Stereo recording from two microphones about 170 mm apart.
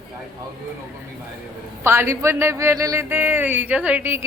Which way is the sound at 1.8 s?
15° right (ahead or behind).